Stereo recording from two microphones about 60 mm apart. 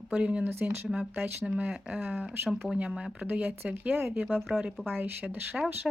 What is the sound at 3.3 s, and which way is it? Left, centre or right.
Speech, right.